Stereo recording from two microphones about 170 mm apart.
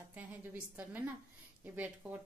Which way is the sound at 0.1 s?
10° right (ahead or behind).